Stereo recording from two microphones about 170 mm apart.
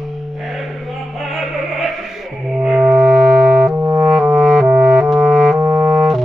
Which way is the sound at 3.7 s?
20° right (ahead or behind).